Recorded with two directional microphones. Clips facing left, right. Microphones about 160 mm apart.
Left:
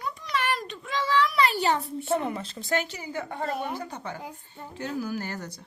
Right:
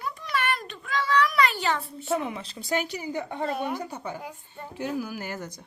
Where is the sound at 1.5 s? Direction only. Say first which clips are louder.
Left 3 dB; 40° left (ahead or behind).